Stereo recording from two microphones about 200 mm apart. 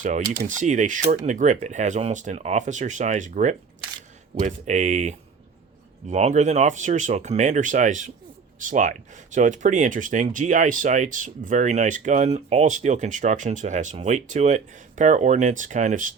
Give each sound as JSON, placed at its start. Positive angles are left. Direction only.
{"t": 0.0, "sound": "speech", "side_deg": -40}